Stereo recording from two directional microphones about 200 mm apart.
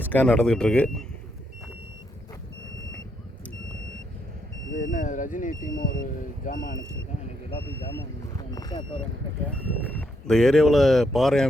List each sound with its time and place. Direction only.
0.0 s speech: 10° left (ahead or behind)
4.8 s speech: 40° left (ahead or behind)
7.5 s speech: 25° left (ahead or behind)
10.0 s speech: 5° left (ahead or behind)